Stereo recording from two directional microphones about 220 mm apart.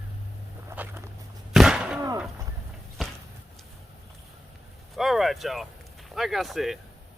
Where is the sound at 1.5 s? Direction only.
Centre (ahead or behind).